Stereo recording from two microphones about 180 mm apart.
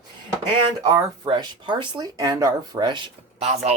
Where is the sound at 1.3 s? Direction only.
25° right (ahead or behind).